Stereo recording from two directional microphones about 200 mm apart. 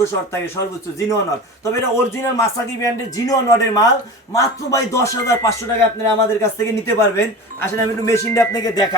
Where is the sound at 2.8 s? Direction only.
15° left (ahead or behind).